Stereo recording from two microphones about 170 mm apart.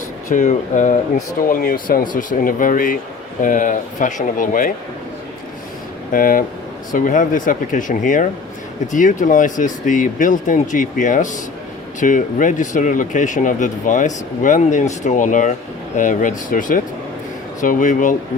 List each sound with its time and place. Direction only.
0.3 s speech: 45° left (ahead or behind)
6.1 s speech: 55° left (ahead or behind)